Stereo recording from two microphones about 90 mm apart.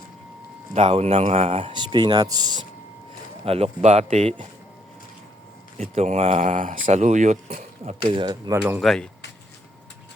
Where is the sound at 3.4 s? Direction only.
90° right.